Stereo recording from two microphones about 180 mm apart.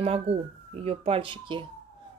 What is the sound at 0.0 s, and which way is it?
Speech, 35° right (ahead or behind).